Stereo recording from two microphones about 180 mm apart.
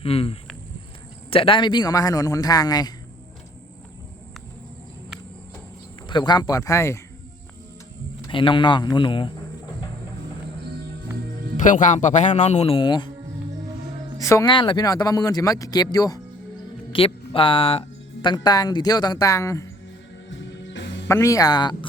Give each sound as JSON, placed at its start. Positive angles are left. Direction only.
{"t": 0.0, "sound": "speech", "side_deg": 35}
{"t": 6.1, "sound": "speech", "side_deg": 25}
{"t": 8.2, "sound": "speech", "side_deg": 25}
{"t": 11.6, "sound": "speech", "side_deg": 45}
{"t": 14.2, "sound": "speech", "side_deg": 15}
{"t": 16.9, "sound": "music", "side_deg": 30}
{"t": 18.4, "sound": "speech", "side_deg": 20}
{"t": 20.3, "sound": "music", "side_deg": 90}
{"t": 21.1, "sound": "speech", "side_deg": 15}